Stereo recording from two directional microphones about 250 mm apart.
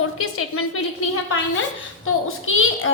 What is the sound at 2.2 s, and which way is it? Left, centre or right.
Speech, left.